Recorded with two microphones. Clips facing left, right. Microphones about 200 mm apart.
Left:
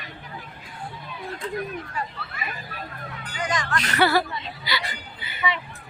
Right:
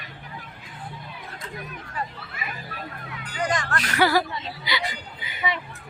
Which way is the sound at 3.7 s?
10° right (ahead or behind).